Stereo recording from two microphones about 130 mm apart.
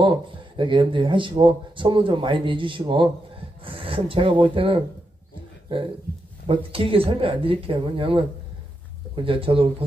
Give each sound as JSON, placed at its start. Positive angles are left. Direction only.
{"t": 0.0, "sound": "speech", "side_deg": -40}
{"t": 6.4, "sound": "speech", "side_deg": -45}